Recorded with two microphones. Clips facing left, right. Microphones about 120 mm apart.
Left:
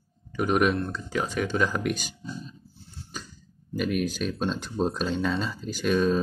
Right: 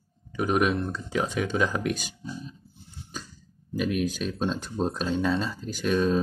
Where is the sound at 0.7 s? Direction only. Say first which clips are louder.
Even; 15° right (ahead or behind).